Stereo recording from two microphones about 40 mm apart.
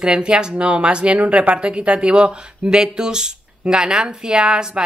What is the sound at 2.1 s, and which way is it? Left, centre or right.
A woman's voice, centre.